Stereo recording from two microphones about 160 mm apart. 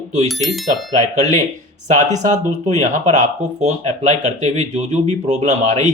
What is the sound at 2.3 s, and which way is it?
Speech, 45° right (ahead or behind).